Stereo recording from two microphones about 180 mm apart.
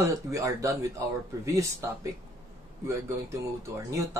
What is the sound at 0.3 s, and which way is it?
Speech, 15° right (ahead or behind).